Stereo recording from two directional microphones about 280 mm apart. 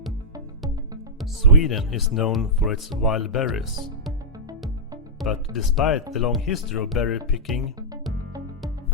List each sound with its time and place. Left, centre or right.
1.2 s speech: centre
5.2 s speech: centre